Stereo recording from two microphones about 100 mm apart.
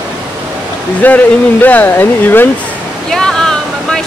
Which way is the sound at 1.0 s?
15° left (ahead or behind).